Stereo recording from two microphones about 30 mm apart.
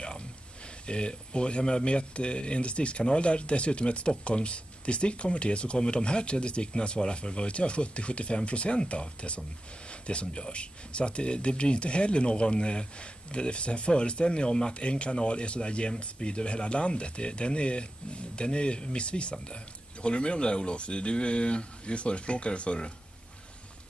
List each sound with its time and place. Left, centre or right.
0.8 s speech: left
9.8 s a sound: left
10.4 s speech: left